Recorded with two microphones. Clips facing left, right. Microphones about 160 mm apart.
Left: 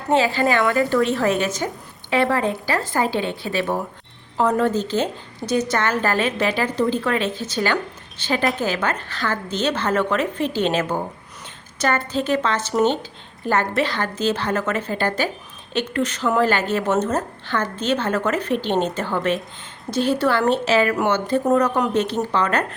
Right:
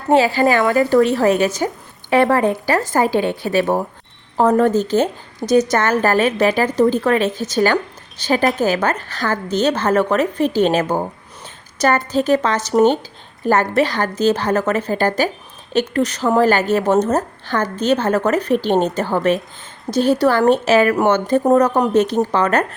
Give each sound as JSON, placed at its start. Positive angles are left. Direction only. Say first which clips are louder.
{"t": 0.1, "sound": "a woman's voice", "louder": "right 4 dB", "side_deg": -40}
{"t": 0.6, "sound": "a woman's voice", "louder": "right 4 dB", "side_deg": -20}
{"t": 1.1, "sound": "a woman's voice", "louder": "right 5 dB", "side_deg": -40}